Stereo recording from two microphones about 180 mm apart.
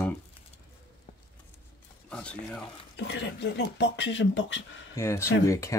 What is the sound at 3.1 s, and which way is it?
Speech, 70° left (ahead or behind).